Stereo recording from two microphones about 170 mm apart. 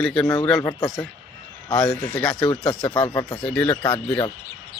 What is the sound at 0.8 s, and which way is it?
A man's voice, centre (ahead or behind).